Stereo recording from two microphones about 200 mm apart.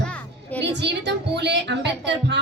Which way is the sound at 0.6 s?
60° right (ahead or behind).